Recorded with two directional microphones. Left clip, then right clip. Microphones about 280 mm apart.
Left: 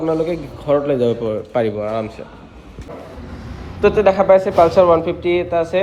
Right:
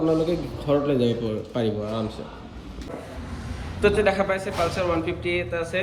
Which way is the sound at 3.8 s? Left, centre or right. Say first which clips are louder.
Left 7 dB; centre.